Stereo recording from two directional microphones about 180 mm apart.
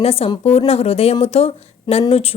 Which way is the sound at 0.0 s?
35° left (ahead or behind).